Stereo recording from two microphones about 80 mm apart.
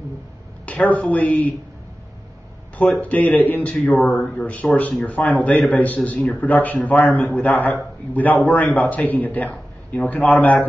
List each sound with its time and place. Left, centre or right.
0.7 s a man's voice: centre
2.8 s a man's voice: centre